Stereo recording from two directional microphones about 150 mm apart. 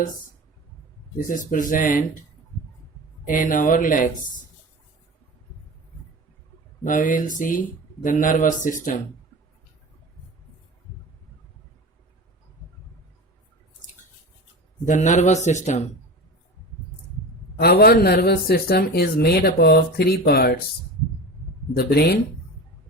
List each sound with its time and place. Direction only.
1.3 s speech: 60° left (ahead or behind)
3.2 s speech: 65° left (ahead or behind)
6.8 s speech: 65° left (ahead or behind)
14.8 s a man's voice: 55° left (ahead or behind)
17.6 s speech: 90° left
21.8 s speech: 90° left